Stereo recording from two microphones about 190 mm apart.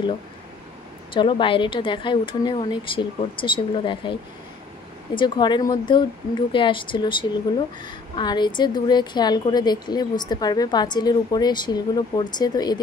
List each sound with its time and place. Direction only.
1.1 s a woman's voice: 25° left (ahead or behind)